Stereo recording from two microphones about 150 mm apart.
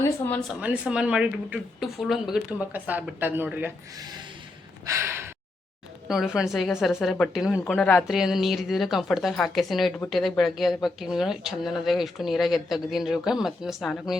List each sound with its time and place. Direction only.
0.6 s speech: 10° right (ahead or behind)
4.9 s gasp: 20° right (ahead or behind)
6.1 s speech: 5° right (ahead or behind)
7.6 s speech: 10° left (ahead or behind)
8.0 s speech: 5° right (ahead or behind)